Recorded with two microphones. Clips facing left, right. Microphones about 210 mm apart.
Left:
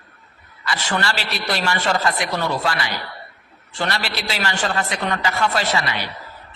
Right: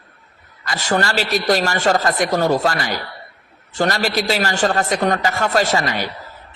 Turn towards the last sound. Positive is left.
turn(degrees=-45)  # may be behind; listen again after turning